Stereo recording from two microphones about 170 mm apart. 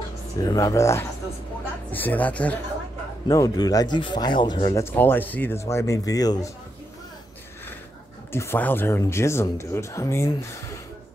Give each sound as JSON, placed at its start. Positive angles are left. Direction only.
{"t": 0.4, "sound": "speech", "side_deg": 20}
{"t": 3.3, "sound": "speech", "side_deg": 20}
{"t": 4.8, "sound": "speech", "side_deg": 10}
{"t": 8.3, "sound": "speech", "side_deg": 15}